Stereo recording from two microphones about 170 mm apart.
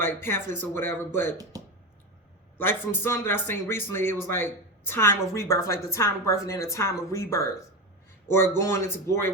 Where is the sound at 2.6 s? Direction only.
15° left (ahead or behind).